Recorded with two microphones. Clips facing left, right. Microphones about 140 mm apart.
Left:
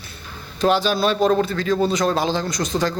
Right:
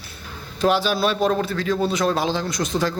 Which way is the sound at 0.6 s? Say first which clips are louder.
Left 1 dB; centre (ahead or behind).